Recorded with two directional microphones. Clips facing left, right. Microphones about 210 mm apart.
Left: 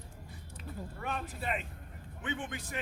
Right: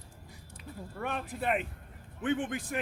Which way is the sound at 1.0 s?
55° right (ahead or behind).